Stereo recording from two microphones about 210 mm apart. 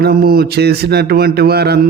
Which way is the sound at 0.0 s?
45° right (ahead or behind).